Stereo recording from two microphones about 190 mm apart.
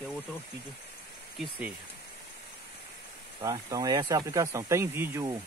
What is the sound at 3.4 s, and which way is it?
Speech, 20° right (ahead or behind).